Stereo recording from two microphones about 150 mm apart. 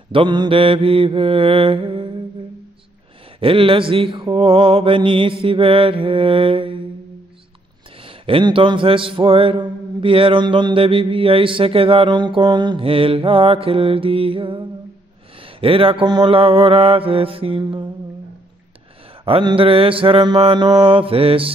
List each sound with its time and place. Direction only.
0.1 s mantra: 30° right (ahead or behind)
3.3 s mantra: 35° right (ahead or behind)
8.0 s mantra: 35° right (ahead or behind)
19.2 s mantra: 35° right (ahead or behind)